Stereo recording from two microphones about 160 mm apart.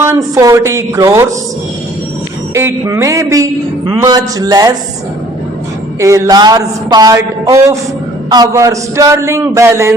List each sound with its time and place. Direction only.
0.0 s speech: 20° right (ahead or behind)
2.6 s speech: 15° right (ahead or behind)
6.0 s speech: 20° right (ahead or behind)